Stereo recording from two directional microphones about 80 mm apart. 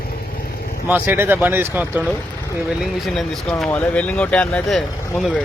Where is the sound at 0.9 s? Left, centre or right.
Right.